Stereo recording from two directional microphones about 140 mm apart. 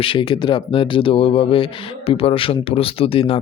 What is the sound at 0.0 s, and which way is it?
Speech, 40° left (ahead or behind).